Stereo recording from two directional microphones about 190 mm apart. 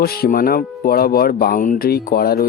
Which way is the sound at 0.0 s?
55° left (ahead or behind).